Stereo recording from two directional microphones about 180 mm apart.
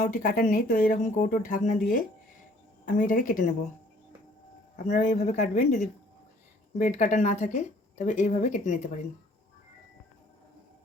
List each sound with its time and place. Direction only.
0.0 s speech: 50° left (ahead or behind)
2.8 s speech: 45° left (ahead or behind)
4.9 s speech: 45° left (ahead or behind)